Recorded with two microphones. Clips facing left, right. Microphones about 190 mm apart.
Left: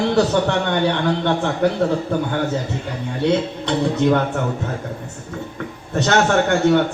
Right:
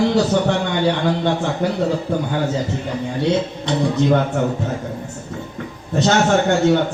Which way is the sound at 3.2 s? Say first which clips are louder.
Left 2 dB; 60° left (ahead or behind).